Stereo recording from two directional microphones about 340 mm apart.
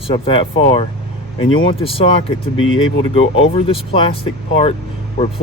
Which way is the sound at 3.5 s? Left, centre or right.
Centre.